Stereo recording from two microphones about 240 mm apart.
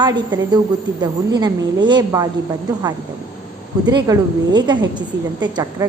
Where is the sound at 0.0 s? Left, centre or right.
Centre.